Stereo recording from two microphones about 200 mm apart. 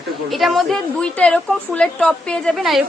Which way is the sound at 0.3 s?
Centre (ahead or behind).